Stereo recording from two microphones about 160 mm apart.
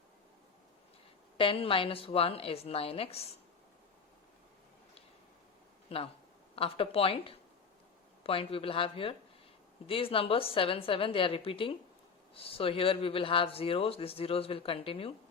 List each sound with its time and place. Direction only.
1.4 s speech: 35° left (ahead or behind)
5.9 s speech: 35° left (ahead or behind)